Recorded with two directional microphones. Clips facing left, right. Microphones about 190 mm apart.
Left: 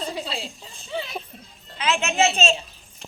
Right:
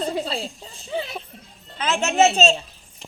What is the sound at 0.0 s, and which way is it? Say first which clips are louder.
A child's voice: right 5 dB; 50° right (ahead or behind).